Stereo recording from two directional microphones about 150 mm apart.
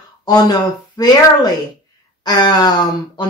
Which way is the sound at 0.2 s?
25° left (ahead or behind).